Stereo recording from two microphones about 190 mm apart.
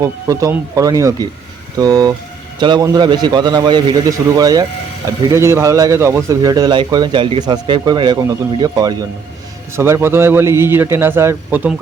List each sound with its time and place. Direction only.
0.0 s a man's voice: 15° right (ahead or behind)